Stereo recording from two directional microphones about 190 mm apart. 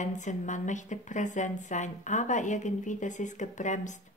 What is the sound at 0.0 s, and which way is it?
A woman's voice, 40° left (ahead or behind).